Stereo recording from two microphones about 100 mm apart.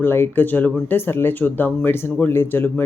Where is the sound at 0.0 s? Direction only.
20° left (ahead or behind).